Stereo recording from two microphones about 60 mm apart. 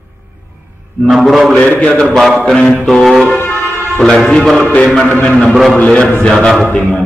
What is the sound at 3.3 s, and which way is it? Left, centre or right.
Vehicle, left.